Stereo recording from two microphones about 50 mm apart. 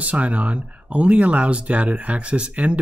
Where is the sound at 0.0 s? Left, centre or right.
Right.